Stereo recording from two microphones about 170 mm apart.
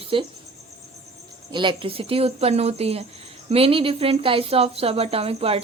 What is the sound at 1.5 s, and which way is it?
Speech, 30° right (ahead or behind).